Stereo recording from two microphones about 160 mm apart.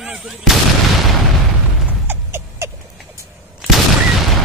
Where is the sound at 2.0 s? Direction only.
15° right (ahead or behind).